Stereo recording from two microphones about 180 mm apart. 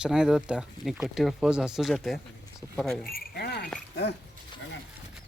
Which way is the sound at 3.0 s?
60° left (ahead or behind).